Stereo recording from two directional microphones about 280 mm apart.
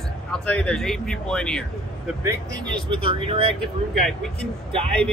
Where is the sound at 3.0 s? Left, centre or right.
Centre.